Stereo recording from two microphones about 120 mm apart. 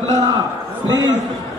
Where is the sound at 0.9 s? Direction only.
35° right (ahead or behind).